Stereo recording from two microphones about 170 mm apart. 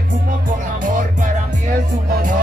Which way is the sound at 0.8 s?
50° right (ahead or behind).